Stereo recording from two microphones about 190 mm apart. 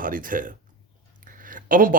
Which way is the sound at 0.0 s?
45° right (ahead or behind).